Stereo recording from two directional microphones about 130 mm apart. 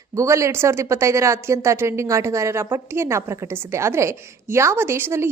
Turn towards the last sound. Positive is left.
turn(degrees=-20)  # may be behind; listen again after turning